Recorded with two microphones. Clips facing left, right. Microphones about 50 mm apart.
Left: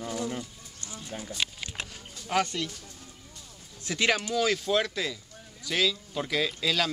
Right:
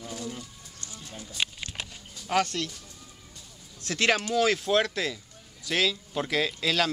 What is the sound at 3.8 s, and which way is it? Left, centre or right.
Speech, centre.